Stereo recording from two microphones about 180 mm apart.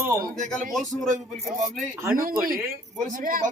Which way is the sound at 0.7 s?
Centre (ahead or behind).